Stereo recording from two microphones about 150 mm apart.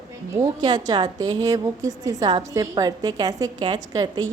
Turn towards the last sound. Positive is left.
turn(degrees=-30)  # may be behind; listen again after turning